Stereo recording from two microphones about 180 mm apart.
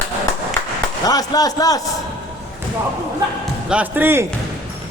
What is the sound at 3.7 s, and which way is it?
Speech, 10° right (ahead or behind).